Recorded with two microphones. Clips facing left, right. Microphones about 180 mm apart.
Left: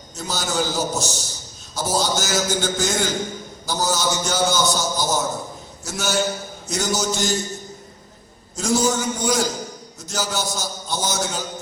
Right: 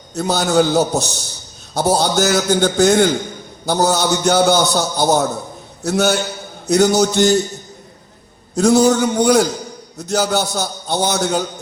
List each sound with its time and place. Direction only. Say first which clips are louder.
0.1 s a man's voice: right 10 dB; 65° right (ahead or behind)
8.5 s a man's voice: right 8 dB; 65° right (ahead or behind)